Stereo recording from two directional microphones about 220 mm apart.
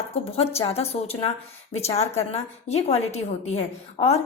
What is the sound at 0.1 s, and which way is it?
Speech, 25° left (ahead or behind).